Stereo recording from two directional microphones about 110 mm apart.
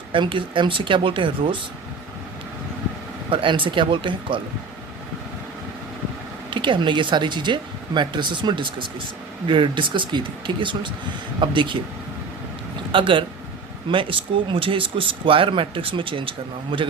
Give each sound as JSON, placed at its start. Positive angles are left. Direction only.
{"t": 0.1, "sound": "speech", "side_deg": -50}
{"t": 3.2, "sound": "speech", "side_deg": -50}
{"t": 6.5, "sound": "speech", "side_deg": -45}
{"t": 12.9, "sound": "speech", "side_deg": -50}